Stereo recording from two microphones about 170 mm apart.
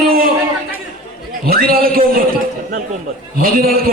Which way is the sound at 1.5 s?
60° right (ahead or behind).